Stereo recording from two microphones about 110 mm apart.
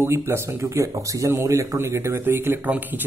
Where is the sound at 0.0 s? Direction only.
25° right (ahead or behind).